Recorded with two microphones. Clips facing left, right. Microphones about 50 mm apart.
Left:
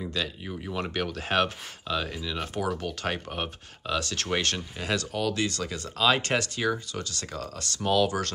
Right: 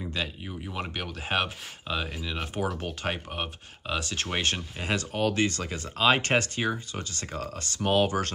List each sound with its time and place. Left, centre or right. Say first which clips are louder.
0.2 s speech: left 1 dB; centre
0.7 s speech: left 5 dB; centre; by 8.3 s right